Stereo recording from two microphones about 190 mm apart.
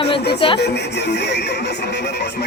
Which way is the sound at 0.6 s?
60° left (ahead or behind).